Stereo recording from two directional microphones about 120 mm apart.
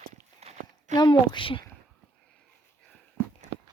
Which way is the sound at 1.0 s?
40° left (ahead or behind).